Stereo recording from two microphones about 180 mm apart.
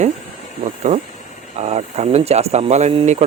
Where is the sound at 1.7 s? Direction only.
35° right (ahead or behind).